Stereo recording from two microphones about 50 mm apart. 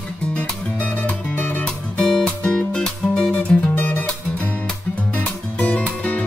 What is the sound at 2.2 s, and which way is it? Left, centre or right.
Music, centre.